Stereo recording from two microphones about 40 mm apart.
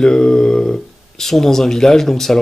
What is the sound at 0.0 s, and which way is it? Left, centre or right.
Speech, centre.